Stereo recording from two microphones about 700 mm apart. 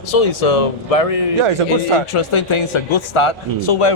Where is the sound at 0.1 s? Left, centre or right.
Left.